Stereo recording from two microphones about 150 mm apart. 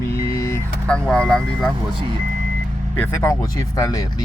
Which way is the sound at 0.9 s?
5° left (ahead or behind).